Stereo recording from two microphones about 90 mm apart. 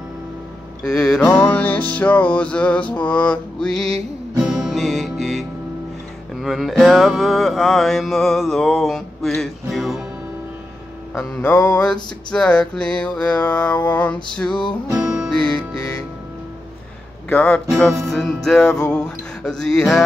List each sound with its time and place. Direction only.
0.8 s music: 5° left (ahead or behind)
4.4 s music: 5° right (ahead or behind)
11.7 s music: 10° left (ahead or behind)
14.5 s music: 60° left (ahead or behind)
14.9 s music: 15° right (ahead or behind)
15.3 s music: 10° left (ahead or behind)
17.3 s music: 10° left (ahead or behind)